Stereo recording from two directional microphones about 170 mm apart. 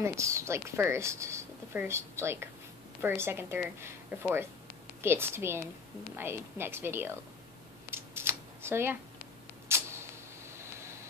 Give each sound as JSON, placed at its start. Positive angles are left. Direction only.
{"t": 0.0, "sound": "speech", "side_deg": -15}
{"t": 7.9, "sound": "scissors", "side_deg": -15}
{"t": 9.7, "sound": "a sound", "side_deg": -15}
{"t": 10.6, "sound": "vehicle", "side_deg": -15}